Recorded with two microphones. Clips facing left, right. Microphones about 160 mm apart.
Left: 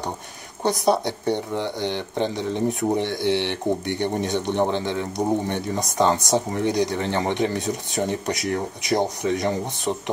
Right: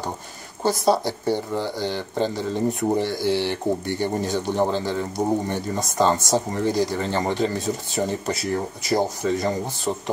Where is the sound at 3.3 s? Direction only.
65° left (ahead or behind).